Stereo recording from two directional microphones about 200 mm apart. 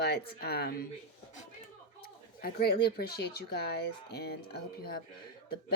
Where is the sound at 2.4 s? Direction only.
50° left (ahead or behind).